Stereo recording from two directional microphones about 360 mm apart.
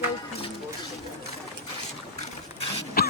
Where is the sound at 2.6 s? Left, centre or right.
Left.